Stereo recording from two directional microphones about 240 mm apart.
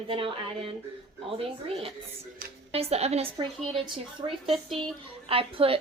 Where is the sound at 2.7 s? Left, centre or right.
Right.